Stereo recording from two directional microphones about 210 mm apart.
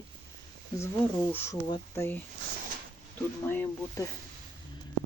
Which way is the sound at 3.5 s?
10° left (ahead or behind).